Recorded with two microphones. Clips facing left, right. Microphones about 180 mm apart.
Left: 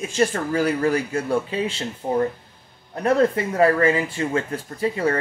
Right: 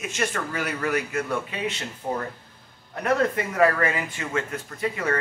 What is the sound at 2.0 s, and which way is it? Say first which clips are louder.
Speech: left 6 dB; 20° left (ahead or behind).